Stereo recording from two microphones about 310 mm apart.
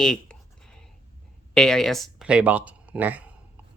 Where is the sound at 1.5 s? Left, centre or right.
Centre.